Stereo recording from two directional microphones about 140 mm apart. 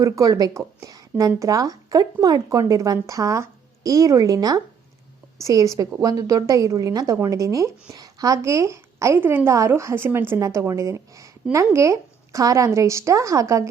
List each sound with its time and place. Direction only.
0.0 s a woman's voice: 25° right (ahead or behind)